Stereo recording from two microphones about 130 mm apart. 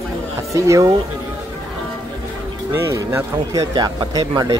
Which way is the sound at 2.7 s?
20° right (ahead or behind).